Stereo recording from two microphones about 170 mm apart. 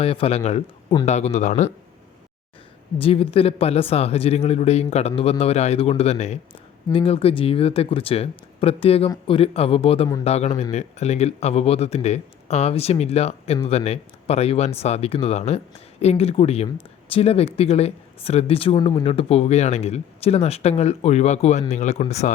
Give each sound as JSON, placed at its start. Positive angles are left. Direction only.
{"t": 0.0, "sound": "speech", "side_deg": 35}
{"t": 3.0, "sound": "speech", "side_deg": 35}